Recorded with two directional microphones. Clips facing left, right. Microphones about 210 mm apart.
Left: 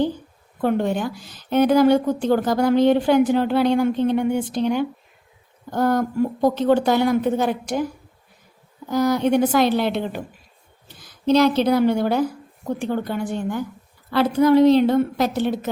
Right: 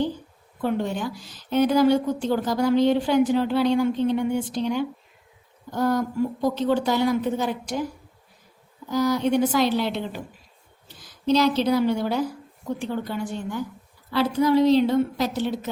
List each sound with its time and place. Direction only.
0.6 s a woman's voice: 55° left (ahead or behind)
8.9 s a woman's voice: 55° left (ahead or behind)